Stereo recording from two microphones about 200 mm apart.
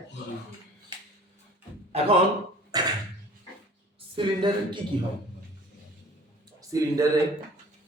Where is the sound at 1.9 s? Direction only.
30° right (ahead or behind).